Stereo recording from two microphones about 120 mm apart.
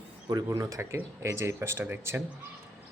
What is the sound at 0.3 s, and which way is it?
Speech, 25° right (ahead or behind).